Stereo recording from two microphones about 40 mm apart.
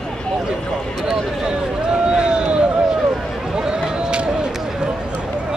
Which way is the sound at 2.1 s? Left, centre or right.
Right.